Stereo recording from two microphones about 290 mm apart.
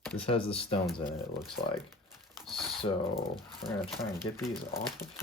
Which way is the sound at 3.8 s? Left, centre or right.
Centre.